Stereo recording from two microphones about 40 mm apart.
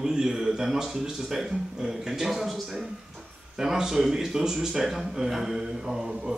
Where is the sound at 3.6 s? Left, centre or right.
Centre.